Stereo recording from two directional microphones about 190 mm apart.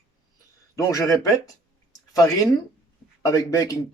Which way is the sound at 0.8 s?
15° left (ahead or behind).